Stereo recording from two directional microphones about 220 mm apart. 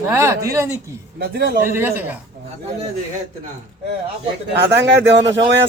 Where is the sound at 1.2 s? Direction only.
45° right (ahead or behind).